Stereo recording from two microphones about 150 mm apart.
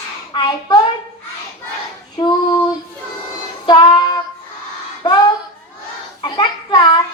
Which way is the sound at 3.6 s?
30° left (ahead or behind).